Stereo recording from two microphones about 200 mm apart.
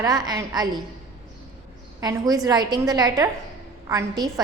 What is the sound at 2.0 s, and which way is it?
A woman's voice, 20° right (ahead or behind).